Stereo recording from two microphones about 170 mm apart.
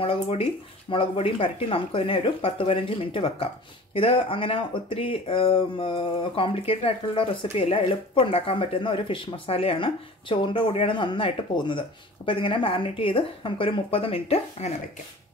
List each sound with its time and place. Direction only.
0.0 s speech: 35° left (ahead or behind)